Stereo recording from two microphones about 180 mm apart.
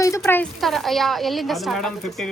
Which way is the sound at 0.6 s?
Centre (ahead or behind).